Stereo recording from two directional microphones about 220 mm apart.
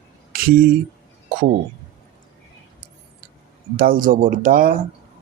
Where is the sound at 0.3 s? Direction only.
40° right (ahead or behind).